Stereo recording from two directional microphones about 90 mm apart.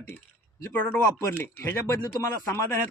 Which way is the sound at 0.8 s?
25° left (ahead or behind).